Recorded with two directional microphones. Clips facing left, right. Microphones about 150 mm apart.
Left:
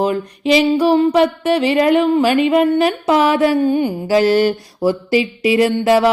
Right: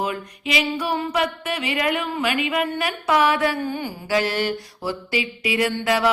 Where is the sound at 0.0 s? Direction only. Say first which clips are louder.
Left 9 dB; 35° left (ahead or behind).